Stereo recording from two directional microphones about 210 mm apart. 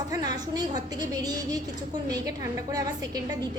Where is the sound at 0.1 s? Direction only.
20° right (ahead or behind).